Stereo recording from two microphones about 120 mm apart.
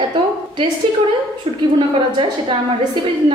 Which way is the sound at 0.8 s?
45° right (ahead or behind).